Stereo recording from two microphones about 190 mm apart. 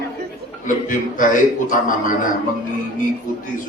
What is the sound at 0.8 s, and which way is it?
A man's voice, 45° left (ahead or behind).